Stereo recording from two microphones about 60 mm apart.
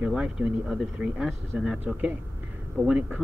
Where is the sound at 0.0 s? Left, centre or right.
Centre.